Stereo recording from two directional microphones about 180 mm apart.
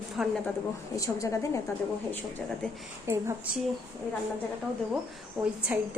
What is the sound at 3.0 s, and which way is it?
Speech, 15° right (ahead or behind).